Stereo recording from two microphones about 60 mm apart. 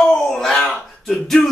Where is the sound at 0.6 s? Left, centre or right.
Centre.